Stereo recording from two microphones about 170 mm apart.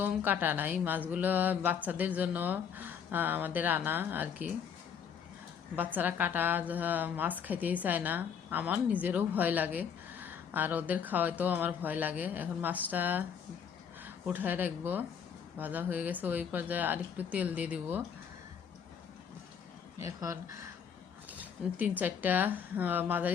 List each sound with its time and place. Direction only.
0.0 s a woman's voice: 10° right (ahead or behind)
5.7 s a woman's voice: 10° right (ahead or behind)
20.0 s a woman's voice: 20° right (ahead or behind)
21.8 s a woman's voice: 10° right (ahead or behind)